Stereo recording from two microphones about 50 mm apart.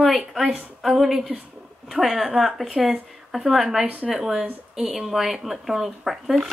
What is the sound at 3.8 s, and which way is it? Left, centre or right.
Speech, right.